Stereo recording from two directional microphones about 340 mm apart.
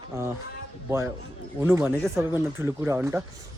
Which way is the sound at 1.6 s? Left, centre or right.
Centre.